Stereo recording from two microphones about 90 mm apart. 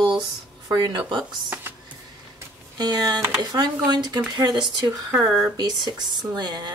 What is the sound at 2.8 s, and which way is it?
Speech, 50° right (ahead or behind).